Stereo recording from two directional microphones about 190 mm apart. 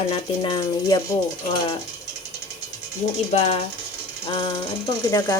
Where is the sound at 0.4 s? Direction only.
20° left (ahead or behind).